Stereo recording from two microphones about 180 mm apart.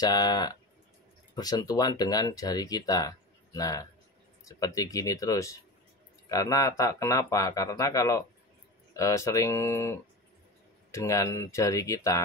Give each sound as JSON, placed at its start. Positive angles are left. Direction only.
{"t": 0.0, "sound": "speech", "side_deg": 20}